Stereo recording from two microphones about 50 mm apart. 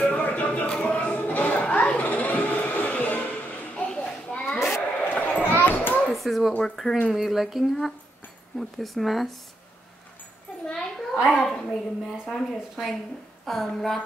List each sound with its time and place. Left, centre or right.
0.0 s music: left
0.7 s sheep: left
3.7 s children playing: left
5.0 s children playing: left
6.1 s a sound: centre
6.6 s speech: centre
10.7 s a sound: centre
11.3 s a woman's voice: centre
13.5 s a woman's voice: centre